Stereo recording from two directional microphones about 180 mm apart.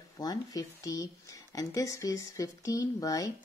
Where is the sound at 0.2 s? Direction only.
20° left (ahead or behind).